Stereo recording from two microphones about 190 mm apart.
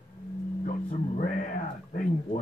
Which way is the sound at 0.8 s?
45° left (ahead or behind).